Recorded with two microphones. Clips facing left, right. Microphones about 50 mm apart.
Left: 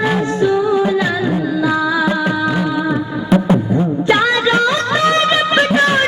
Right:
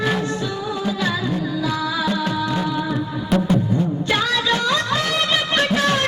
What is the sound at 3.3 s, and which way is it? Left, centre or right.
Music, left.